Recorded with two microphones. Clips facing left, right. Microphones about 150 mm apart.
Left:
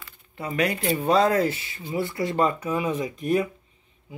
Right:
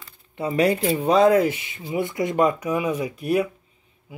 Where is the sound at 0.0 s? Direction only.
30° right (ahead or behind).